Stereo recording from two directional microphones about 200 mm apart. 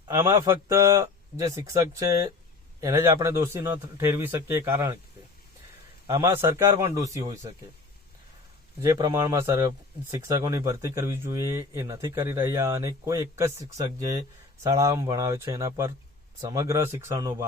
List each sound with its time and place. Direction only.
0.1 s speech: 15° right (ahead or behind)
6.1 s speech: 15° right (ahead or behind)
8.8 s speech: 15° right (ahead or behind)